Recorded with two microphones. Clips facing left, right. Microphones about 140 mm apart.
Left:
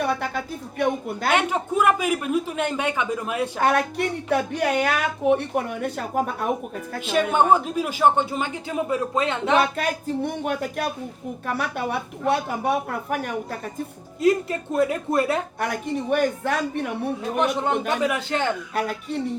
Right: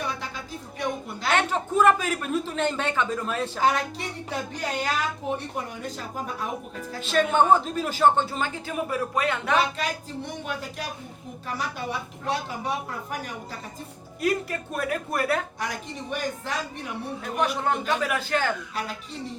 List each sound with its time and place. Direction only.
0.0 s a sound: 55° left (ahead or behind)
1.3 s speech: 10° left (ahead or behind)
3.6 s a woman's voice: 60° left (ahead or behind)
7.0 s speech: 15° left (ahead or behind)
9.6 s a woman's voice: 55° left (ahead or behind)
14.2 s a woman's voice: 25° left (ahead or behind)
15.6 s a woman's voice: 55° left (ahead or behind)
17.4 s a woman's voice: 20° left (ahead or behind)
18.7 s a woman's voice: 55° left (ahead or behind)